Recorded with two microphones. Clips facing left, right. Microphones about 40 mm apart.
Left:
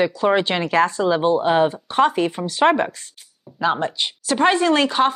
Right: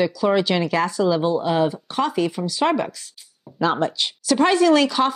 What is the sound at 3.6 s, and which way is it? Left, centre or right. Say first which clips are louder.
Speech: even; centre.